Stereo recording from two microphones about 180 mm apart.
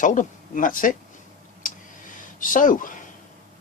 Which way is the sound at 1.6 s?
45° left (ahead or behind).